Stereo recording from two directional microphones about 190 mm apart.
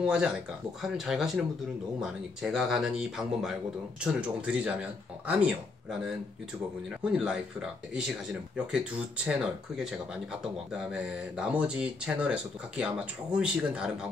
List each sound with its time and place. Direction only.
0.0 s speech: 5° right (ahead or behind)